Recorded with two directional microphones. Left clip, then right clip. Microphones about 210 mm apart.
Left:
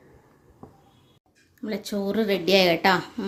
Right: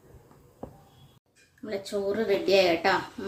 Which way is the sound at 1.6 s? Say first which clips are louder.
Left 1 dB; 45° left (ahead or behind).